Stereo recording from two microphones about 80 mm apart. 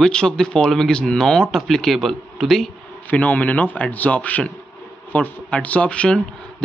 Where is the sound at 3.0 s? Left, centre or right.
Centre.